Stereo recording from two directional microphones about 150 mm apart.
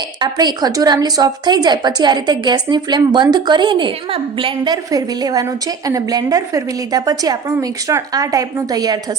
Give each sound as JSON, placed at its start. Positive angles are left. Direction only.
{"t": 0.2, "sound": "a woman's voice", "side_deg": -30}